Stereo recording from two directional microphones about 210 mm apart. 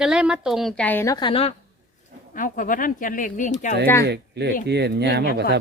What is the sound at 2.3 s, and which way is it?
Speech, 40° left (ahead or behind).